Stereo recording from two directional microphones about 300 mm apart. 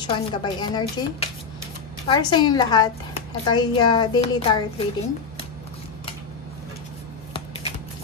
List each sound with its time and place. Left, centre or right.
0.0 s a woman's voice: centre
7.3 s music: centre